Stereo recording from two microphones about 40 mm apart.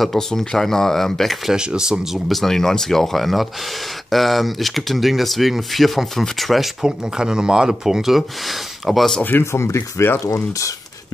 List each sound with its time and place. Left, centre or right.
0.3 s speech: centre
1.5 s speech: centre
2.1 s speech: centre
6.8 s speech: centre
9.3 s speech: left
9.8 s speech: left